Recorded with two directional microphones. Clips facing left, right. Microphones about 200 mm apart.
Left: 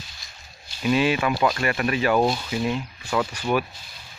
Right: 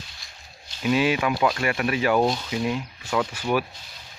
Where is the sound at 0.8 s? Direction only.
10° right (ahead or behind).